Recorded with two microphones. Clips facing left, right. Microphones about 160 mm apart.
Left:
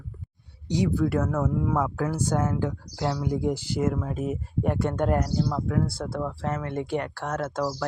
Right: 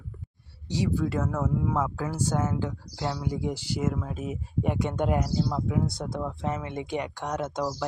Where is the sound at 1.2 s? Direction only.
5° right (ahead or behind).